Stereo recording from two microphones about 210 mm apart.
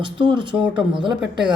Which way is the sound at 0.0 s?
20° right (ahead or behind).